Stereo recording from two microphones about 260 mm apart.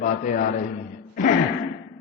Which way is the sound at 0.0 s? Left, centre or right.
Left.